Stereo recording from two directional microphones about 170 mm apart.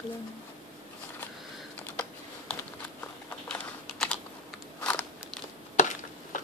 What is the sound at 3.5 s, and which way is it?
Typing, 5° left (ahead or behind).